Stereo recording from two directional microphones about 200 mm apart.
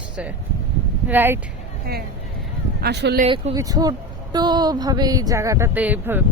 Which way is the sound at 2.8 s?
55° right (ahead or behind).